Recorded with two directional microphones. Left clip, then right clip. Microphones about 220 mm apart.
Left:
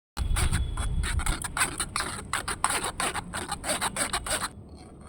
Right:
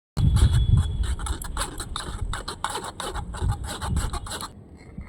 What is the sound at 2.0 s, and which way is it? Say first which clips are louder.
Beatboxing: left 3 dB; 20° left (ahead or behind).